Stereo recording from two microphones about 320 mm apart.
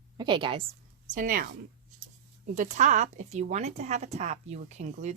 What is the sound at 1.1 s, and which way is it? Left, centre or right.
Speech, right.